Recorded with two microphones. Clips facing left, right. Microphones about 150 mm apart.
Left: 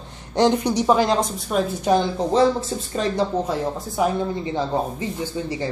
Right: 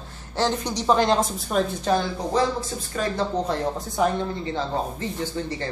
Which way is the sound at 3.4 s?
5° left (ahead or behind).